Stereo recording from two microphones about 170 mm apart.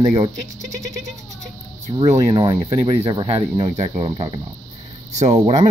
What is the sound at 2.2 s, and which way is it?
Speech, 30° right (ahead or behind).